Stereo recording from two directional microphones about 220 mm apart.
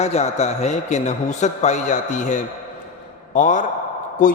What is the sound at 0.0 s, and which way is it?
A man's voice, 30° left (ahead or behind).